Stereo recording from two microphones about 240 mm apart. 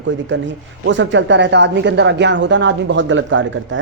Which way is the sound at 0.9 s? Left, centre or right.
Right.